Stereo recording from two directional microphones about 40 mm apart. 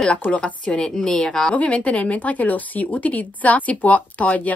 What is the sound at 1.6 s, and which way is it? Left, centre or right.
Speech, left.